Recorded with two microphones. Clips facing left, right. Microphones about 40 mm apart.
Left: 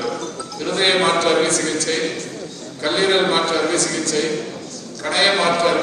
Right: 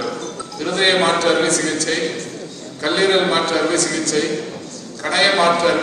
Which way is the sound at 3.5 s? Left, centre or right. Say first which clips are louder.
Right 1 dB; right.